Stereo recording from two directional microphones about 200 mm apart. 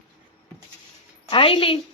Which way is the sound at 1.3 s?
25° left (ahead or behind).